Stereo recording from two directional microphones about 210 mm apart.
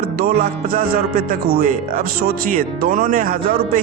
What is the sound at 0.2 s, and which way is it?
Speech, 45° right (ahead or behind).